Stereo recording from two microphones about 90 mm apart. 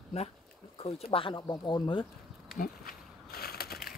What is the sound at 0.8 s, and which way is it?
Speech, 85° left.